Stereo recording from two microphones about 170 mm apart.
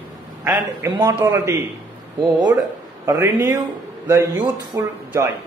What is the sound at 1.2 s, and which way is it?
Speech, 20° right (ahead or behind).